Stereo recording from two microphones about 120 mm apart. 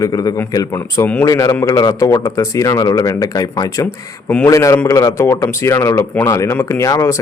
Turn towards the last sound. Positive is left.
turn(degrees=25)  # may be behind; listen again after turning